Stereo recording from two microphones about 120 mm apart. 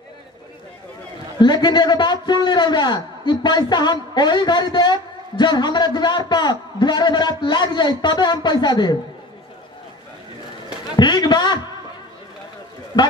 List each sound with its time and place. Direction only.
1.4 s a man's voice: 35° left (ahead or behind)
11.0 s a man's voice: 35° left (ahead or behind)
12.9 s a man's voice: 40° left (ahead or behind)